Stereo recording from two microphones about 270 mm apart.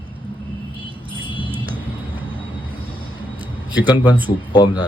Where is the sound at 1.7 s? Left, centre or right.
Centre.